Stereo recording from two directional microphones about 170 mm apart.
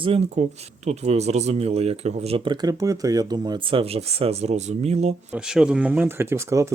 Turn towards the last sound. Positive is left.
turn(degrees=-15)  # may be behind; listen again after turning